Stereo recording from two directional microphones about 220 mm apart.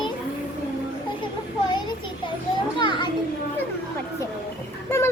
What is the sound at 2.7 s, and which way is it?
Children playing, 20° left (ahead or behind).